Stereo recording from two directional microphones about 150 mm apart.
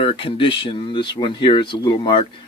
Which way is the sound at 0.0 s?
40° left (ahead or behind).